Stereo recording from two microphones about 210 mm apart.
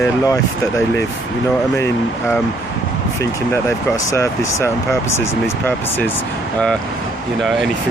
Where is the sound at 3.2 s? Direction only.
15° left (ahead or behind); by 7.6 s centre (ahead or behind).